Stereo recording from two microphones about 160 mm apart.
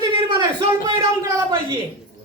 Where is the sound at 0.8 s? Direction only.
30° right (ahead or behind).